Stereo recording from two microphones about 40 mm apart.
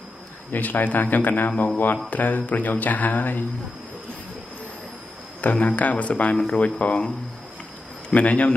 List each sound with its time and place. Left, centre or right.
0.5 s speech: left
5.4 s speech: left
6.3 s speech: centre
6.6 s speech: left
8.1 s speech: left